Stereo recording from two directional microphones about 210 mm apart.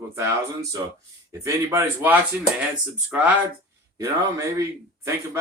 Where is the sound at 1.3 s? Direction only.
15° right (ahead or behind).